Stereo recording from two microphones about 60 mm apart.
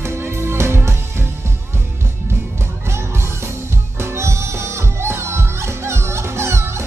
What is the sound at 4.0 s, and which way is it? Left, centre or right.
Music, right.